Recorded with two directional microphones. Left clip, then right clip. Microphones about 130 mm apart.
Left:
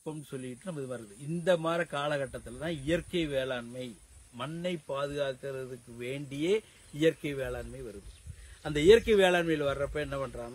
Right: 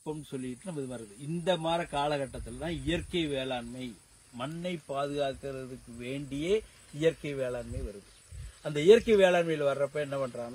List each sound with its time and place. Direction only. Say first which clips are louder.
0.3 s speech: right 1 dB; 35° left (ahead or behind)
4.6 s speech: left 1 dB; 65° left (ahead or behind)
8.6 s speech: even; 75° left (ahead or behind)